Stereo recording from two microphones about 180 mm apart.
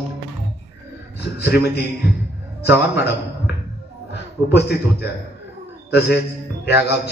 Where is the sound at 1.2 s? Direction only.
60° left (ahead or behind).